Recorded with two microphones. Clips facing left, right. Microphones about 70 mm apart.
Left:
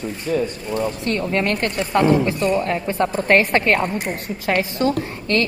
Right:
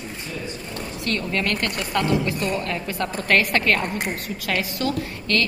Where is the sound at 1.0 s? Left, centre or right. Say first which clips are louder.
Even; left.